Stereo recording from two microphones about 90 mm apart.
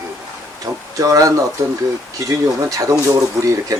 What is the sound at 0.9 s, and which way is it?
Speech, 40° right (ahead or behind).